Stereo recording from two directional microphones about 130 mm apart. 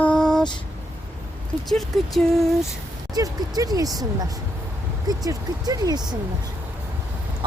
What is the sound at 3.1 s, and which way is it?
Speech, 30° right (ahead or behind).